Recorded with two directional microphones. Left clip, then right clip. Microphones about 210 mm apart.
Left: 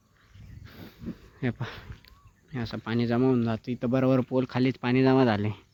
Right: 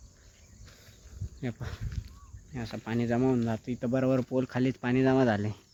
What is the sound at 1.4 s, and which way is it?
Speech, 40° left (ahead or behind).